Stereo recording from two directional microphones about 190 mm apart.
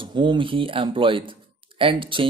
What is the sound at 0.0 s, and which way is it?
Speech, 25° right (ahead or behind).